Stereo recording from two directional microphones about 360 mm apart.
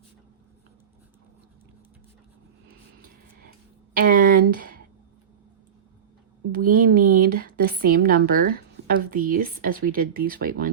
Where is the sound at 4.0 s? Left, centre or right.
Right.